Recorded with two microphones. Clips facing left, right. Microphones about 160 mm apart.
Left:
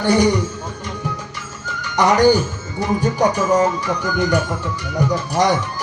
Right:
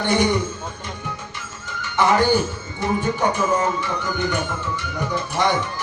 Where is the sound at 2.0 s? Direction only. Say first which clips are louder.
Left 4 dB; 40° left (ahead or behind).